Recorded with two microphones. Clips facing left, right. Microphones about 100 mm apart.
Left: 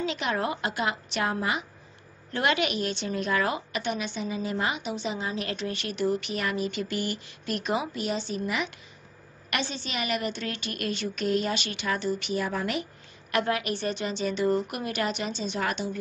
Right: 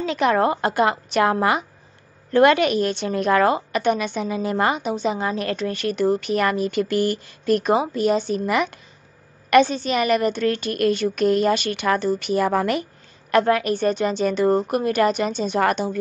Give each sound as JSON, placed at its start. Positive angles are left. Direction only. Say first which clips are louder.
{"t": 0.0, "sound": "a woman's voice", "louder": "right 9 dB", "side_deg": -50}
{"t": 2.3, "sound": "a woman's voice", "louder": "right 11 dB", "side_deg": -50}
{"t": 3.4, "sound": "a woman's voice", "louder": "right 10 dB", "side_deg": -45}
{"t": 4.7, "sound": "a woman's voice", "louder": "right 8 dB", "side_deg": -40}
{"t": 13.3, "sound": "a woman's voice", "louder": "right 9 dB", "side_deg": -40}